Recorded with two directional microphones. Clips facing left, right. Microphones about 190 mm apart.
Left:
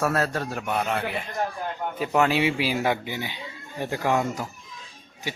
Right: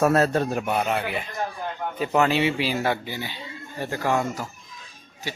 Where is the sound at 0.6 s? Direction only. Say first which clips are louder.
Right 2 dB; 5° right (ahead or behind).